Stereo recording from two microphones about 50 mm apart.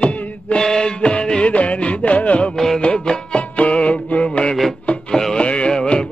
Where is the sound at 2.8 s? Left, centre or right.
Left.